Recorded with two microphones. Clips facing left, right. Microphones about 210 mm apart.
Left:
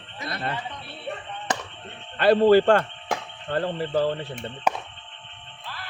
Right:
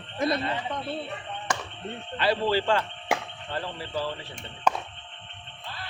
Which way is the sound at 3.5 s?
55° left (ahead or behind).